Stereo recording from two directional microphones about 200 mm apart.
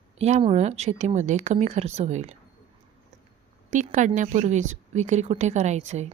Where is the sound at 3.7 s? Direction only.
35° right (ahead or behind).